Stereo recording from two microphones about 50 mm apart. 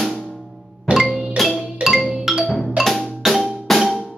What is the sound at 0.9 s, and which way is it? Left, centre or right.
Music, right.